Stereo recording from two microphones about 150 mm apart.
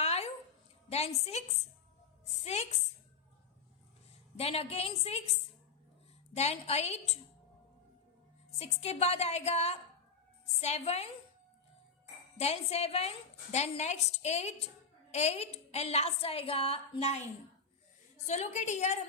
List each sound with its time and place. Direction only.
0.0 s a sound: 45° left (ahead or behind)
0.9 s a woman's voice: 45° left (ahead or behind)
4.4 s a woman's voice: 40° left (ahead or behind)
8.5 s a woman's voice: 45° left (ahead or behind)
12.4 s a woman's voice: 45° left (ahead or behind)
18.3 s a woman's voice: 50° left (ahead or behind)